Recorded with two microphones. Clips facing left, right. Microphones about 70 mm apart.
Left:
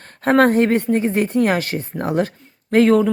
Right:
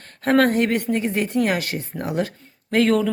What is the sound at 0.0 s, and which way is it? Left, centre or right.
Speech, left.